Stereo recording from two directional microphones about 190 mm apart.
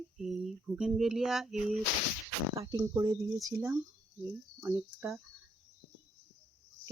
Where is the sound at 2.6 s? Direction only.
20° right (ahead or behind).